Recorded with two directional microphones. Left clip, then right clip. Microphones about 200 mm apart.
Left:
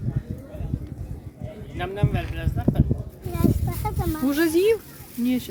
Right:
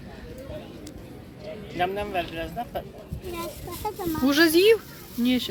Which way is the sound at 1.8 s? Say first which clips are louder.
Right 3 dB; 35° right (ahead or behind).